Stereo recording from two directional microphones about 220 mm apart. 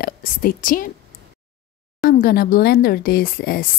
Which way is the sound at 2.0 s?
40° left (ahead or behind).